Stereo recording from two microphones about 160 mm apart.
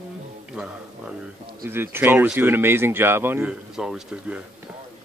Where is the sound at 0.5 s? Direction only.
5° right (ahead or behind).